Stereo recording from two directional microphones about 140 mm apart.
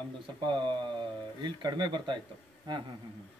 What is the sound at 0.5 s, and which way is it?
Speech, 35° right (ahead or behind).